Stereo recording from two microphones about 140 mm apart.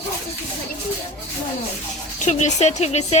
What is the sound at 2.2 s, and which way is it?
Speech, 55° left (ahead or behind).